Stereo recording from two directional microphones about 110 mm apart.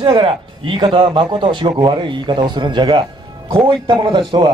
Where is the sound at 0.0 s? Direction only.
50° right (ahead or behind).